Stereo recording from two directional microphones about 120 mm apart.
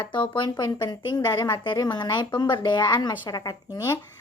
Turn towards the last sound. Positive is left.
turn(degrees=30)  # may be behind; listen again after turning